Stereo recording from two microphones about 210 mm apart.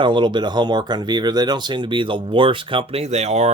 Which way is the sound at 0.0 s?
20° right (ahead or behind).